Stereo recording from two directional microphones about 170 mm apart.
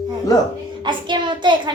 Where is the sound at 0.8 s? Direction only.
30° right (ahead or behind).